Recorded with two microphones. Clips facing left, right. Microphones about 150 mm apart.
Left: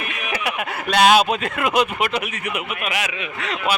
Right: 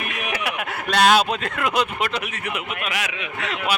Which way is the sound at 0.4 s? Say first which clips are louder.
Left 2 dB; 5° left (ahead or behind).